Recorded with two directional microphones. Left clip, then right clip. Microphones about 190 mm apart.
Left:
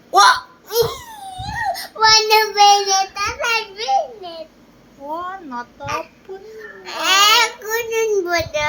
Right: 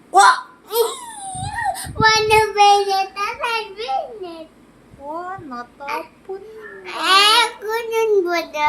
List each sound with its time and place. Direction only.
0.1 s hiccup: centre (ahead or behind)
0.7 s cough: 15° right (ahead or behind)
1.4 s child singing: 10° right (ahead or behind)
5.1 s a child's voice: 5° right (ahead or behind)